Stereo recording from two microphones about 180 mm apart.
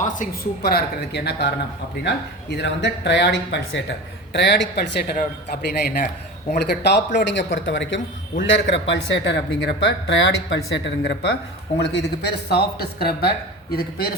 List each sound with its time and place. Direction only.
0.0 s speech: 50° left (ahead or behind); by 7.0 s 65° left (ahead or behind)
7.2 s a man's voice: 80° left
10.8 s speech: 80° left; by 14.1 s 60° left (ahead or behind)